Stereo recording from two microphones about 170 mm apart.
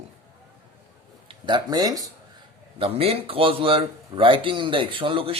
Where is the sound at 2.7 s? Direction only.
35° right (ahead or behind).